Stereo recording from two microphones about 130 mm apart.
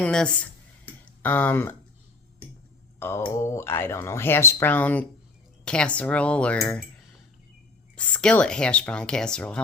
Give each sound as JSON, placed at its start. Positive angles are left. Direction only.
{"t": 0.0, "sound": "speech", "side_deg": 5}
{"t": 3.0, "sound": "speech", "side_deg": 20}
{"t": 7.9, "sound": "speech", "side_deg": 10}